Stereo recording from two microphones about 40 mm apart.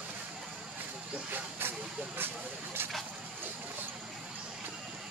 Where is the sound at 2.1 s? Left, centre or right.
Right.